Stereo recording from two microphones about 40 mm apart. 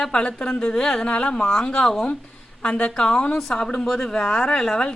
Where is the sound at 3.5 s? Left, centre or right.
Centre.